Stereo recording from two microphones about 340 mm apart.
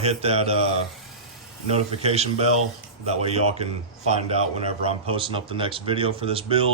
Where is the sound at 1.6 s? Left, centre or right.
Centre.